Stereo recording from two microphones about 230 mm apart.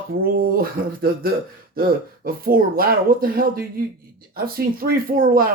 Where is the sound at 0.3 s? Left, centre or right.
Right.